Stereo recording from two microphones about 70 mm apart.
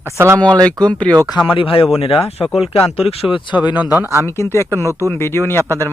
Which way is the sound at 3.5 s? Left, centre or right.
Left.